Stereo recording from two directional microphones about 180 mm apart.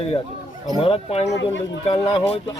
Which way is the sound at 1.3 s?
90° left.